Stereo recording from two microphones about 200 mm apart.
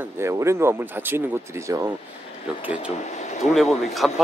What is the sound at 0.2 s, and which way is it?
Speech, 15° right (ahead or behind).